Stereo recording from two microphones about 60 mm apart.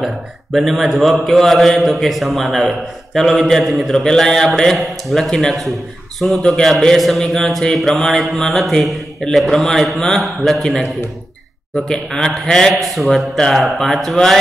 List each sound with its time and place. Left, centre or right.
0.0 s mantra: centre
5.5 s a man's voice: centre
6.4 s mantra: centre
11.7 s a man's voice: centre
12.7 s mantra: centre